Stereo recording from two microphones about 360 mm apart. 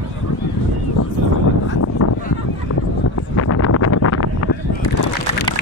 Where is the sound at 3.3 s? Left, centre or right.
Left.